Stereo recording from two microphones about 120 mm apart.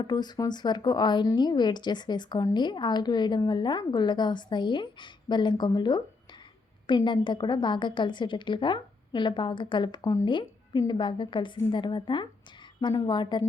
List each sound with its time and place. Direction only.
0.0 s speech: 35° left (ahead or behind)
10.2 s speech: 40° left (ahead or behind)